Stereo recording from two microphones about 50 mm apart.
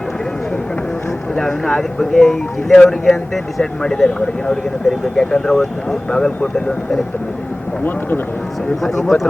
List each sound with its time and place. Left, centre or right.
1.4 s speech: centre
2.1 s speech: centre
6.1 s speech: centre
8.8 s speech: centre